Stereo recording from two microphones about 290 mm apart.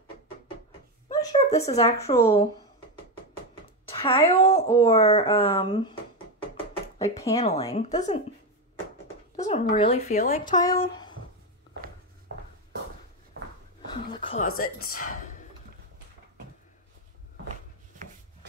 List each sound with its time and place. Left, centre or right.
1.0 s speech: centre
3.9 s speech: centre
7.0 s speech: centre
9.4 s speech: left
14.0 s a sound: centre
14.6 s speech: left